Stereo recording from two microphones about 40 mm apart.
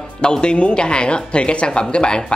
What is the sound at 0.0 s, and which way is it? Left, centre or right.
Speech, centre.